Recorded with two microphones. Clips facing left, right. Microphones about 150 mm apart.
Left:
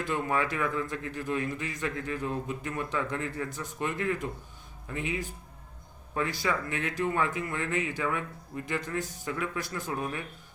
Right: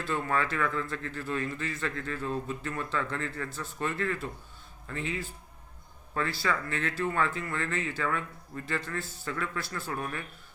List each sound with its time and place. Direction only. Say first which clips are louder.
0.0 s a man's voice: left 1 dB; 15° left (ahead or behind)